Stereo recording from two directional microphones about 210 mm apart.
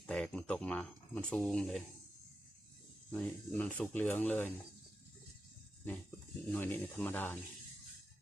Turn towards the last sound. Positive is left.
turn(degrees=10)  # may be behind; listen again after turning